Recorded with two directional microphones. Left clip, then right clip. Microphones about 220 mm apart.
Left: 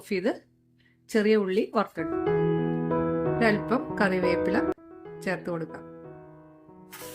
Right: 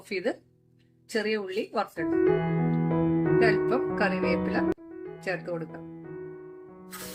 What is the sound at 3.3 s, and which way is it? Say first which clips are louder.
Speech: right 3 dB; 50° left (ahead or behind).